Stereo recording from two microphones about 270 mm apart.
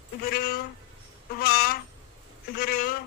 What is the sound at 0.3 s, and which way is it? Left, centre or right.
Speech, left.